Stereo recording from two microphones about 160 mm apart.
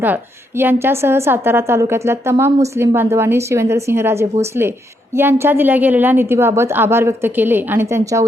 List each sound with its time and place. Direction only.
0.0 s a woman's voice: 10° right (ahead or behind)